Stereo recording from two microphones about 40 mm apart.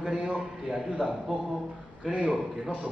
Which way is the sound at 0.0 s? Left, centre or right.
Centre.